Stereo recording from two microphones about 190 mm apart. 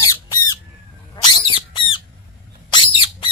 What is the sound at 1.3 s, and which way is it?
Bird, 25° left (ahead or behind).